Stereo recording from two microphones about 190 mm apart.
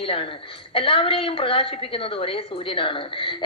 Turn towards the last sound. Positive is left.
turn(degrees=25)  # may be behind; listen again after turning